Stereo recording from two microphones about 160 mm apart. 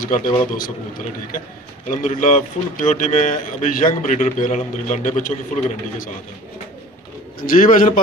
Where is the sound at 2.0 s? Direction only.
50° left (ahead or behind).